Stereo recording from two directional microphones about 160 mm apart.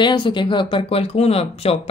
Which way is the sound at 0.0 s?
30° left (ahead or behind).